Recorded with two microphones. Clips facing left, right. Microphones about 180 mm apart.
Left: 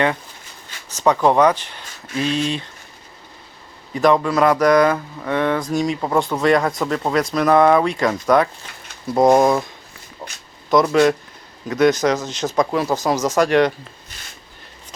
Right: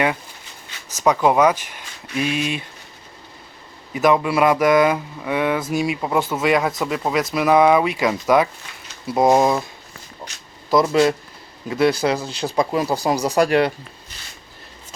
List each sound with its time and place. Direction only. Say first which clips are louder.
1.0 s speech: left 1 dB; 5° right (ahead or behind)
3.9 s speech: left 1 dB; 10° right (ahead or behind)
10.2 s a sound: left 2 dB; centre (ahead or behind)
11.7 s speech: left 2 dB; 30° right (ahead or behind)
11.9 s speech: left 2 dB; 10° right (ahead or behind)
12.2 s speech: left 1 dB; 35° right (ahead or behind)
12.7 s speech: left 1 dB; 10° right (ahead or behind)